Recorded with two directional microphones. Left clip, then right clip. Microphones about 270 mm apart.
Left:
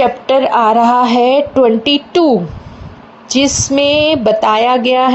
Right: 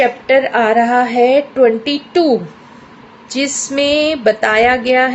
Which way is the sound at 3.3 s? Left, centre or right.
Centre.